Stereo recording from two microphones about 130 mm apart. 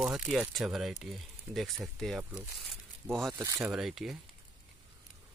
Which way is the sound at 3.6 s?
5° right (ahead or behind).